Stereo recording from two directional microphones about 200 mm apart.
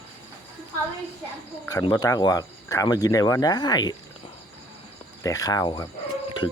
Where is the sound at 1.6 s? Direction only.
20° left (ahead or behind).